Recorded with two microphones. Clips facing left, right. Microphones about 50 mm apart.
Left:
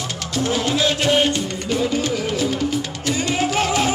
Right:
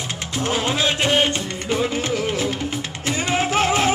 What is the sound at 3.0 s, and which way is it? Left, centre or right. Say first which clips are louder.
Music: even; right.